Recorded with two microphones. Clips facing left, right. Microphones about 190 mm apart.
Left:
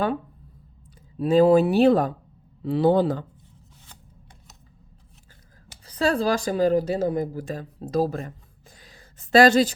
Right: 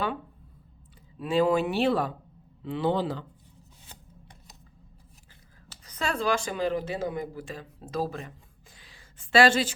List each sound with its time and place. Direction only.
1.2 s speech: 40° left (ahead or behind)
5.8 s speech: 35° left (ahead or behind)
8.8 s a sound: 40° left (ahead or behind)